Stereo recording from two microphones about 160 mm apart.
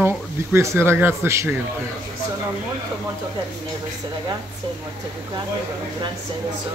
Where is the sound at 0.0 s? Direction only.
15° right (ahead or behind).